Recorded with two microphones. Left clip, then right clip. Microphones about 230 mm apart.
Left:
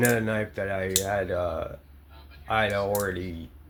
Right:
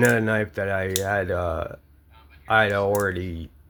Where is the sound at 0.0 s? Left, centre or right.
Right.